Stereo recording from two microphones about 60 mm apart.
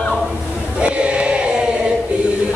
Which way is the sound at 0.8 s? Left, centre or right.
Centre.